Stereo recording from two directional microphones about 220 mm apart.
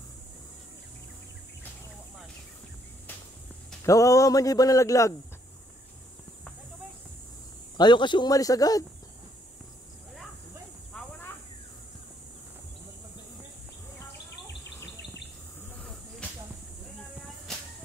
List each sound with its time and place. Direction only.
3.8 s speech: 15° left (ahead or behind)
7.7 s speech: 20° left (ahead or behind)
10.9 s cricket: 5° left (ahead or behind)
14.1 s bird: 50° left (ahead or behind)